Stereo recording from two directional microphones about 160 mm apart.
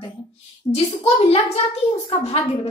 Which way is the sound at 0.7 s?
35° left (ahead or behind).